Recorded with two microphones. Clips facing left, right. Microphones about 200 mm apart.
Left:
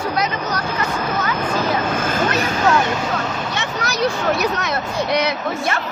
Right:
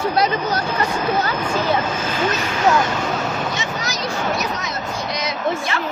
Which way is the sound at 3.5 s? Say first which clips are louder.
Left 1 dB; 60° left (ahead or behind).